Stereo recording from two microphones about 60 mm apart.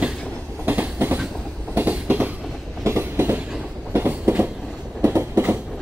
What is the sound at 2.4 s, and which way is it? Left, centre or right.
Train, centre.